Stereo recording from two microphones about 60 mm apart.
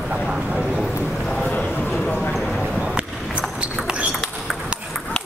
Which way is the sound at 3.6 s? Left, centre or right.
Right.